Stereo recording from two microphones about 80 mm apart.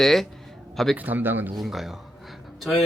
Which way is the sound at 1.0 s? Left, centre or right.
Right.